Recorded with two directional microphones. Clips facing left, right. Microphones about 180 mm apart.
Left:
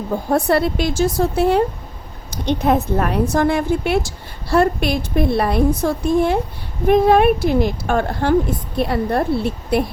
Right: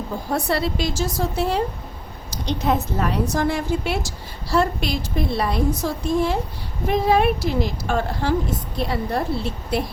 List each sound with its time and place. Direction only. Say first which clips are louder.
0.3 s a woman's voice: left 6 dB; 55° left (ahead or behind)